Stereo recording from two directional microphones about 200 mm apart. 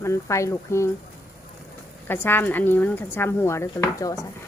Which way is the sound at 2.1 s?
10° left (ahead or behind).